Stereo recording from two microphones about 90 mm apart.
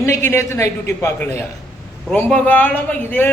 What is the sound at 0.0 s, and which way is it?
A man's voice, 30° left (ahead or behind).